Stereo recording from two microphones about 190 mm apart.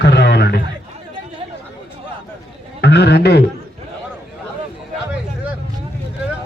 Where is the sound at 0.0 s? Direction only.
60° left (ahead or behind).